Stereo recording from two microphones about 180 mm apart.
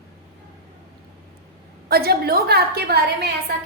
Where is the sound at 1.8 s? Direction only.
60° right (ahead or behind).